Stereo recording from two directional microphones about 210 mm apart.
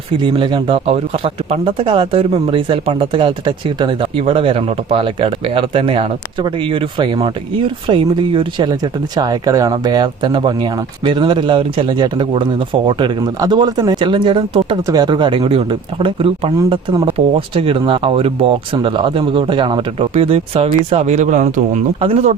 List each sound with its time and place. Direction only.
0.2 s speech: 25° right (ahead or behind)